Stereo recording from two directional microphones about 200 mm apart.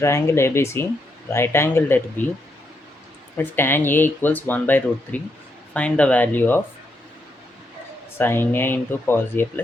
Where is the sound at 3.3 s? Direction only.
10° left (ahead or behind).